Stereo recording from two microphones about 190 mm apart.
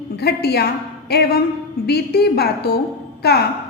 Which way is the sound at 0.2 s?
55° left (ahead or behind).